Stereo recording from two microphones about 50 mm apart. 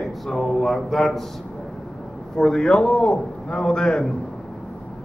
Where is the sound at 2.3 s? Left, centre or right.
Centre.